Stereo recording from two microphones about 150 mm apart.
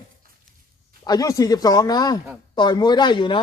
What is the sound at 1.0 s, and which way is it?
A man's voice, 25° left (ahead or behind).